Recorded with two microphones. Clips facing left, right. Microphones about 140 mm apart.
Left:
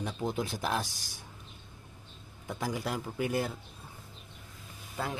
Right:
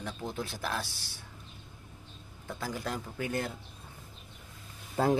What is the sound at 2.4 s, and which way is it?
Speech, 15° left (ahead or behind).